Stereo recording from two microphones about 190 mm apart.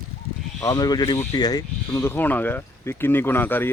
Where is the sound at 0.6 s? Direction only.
20° left (ahead or behind).